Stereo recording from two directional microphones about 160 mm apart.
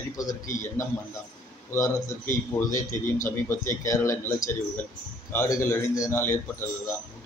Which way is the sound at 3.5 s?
20° left (ahead or behind).